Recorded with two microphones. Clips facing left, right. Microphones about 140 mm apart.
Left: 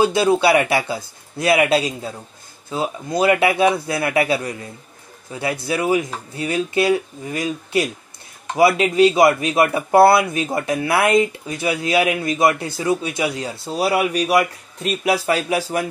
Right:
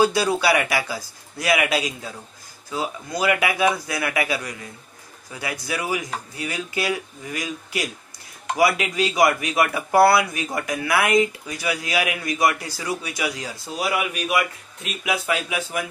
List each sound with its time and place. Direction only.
0.0 s speech: 25° left (ahead or behind)